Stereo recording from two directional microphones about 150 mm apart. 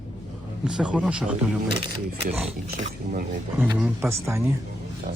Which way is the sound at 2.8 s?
55° right (ahead or behind).